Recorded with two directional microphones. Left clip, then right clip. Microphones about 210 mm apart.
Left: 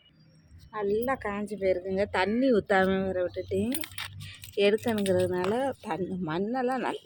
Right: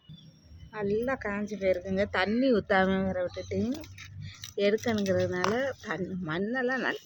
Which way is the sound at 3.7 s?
45° left (ahead or behind).